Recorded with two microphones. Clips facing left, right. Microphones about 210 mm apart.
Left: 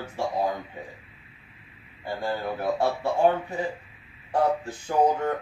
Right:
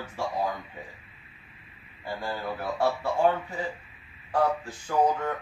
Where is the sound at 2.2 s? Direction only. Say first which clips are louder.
Left 4 dB; 25° left (ahead or behind).